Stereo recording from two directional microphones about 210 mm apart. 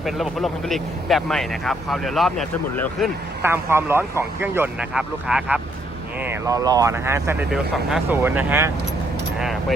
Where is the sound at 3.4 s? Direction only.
10° right (ahead or behind).